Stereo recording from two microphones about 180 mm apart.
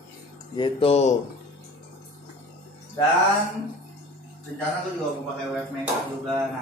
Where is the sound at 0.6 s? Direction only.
30° left (ahead or behind).